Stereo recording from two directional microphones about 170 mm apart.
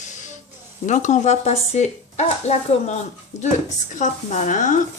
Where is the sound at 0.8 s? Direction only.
45° left (ahead or behind).